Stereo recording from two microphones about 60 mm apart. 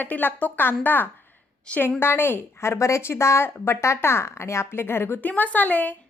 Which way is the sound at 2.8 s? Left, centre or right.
Left.